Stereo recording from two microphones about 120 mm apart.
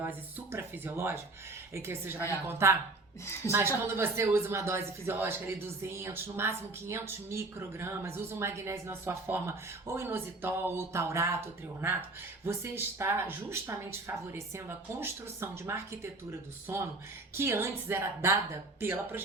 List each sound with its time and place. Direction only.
0.3 s a man's voice: 20° right (ahead or behind)
17.3 s a man's voice: 20° right (ahead or behind)